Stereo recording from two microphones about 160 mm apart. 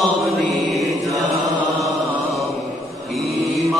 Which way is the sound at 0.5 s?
Centre (ahead or behind).